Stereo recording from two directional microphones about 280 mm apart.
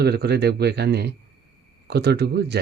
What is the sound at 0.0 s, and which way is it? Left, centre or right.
Speech, right.